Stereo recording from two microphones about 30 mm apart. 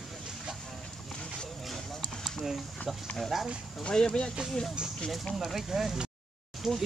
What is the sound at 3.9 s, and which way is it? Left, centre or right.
Speech, left.